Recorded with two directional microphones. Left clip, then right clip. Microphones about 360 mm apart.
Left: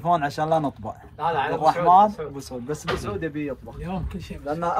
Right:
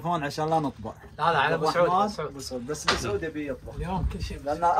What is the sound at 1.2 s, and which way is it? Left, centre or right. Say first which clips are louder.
Speech: right 1 dB; right.